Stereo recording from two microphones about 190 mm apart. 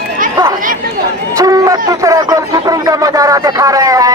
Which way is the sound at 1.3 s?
20° right (ahead or behind).